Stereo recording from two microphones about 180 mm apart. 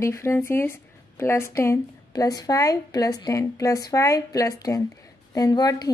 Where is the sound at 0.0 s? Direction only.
15° left (ahead or behind).